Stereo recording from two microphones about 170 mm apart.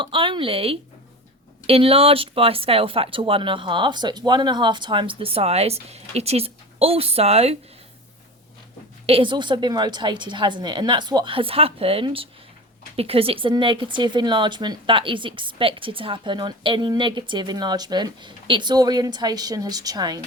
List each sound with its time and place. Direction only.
0.0 s speech: 30° right (ahead or behind)
9.0 s speech: 30° right (ahead or behind)